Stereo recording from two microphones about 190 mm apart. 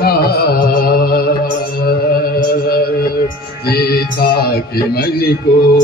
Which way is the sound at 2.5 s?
50° left (ahead or behind).